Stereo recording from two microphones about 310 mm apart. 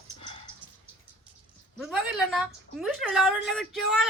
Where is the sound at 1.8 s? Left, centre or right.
Centre.